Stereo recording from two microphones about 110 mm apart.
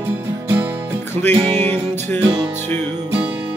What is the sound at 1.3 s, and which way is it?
Music, 90° right.